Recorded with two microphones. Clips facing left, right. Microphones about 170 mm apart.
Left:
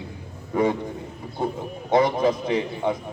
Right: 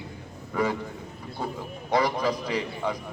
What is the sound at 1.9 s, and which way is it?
A man's voice, 25° left (ahead or behind).